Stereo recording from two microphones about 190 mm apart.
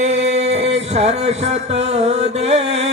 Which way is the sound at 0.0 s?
35° right (ahead or behind).